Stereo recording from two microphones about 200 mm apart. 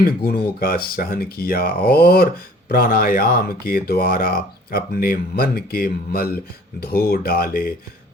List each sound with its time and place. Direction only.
0.2 s speech: 50° left (ahead or behind)